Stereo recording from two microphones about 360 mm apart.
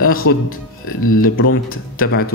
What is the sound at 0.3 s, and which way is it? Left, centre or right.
Speech, left.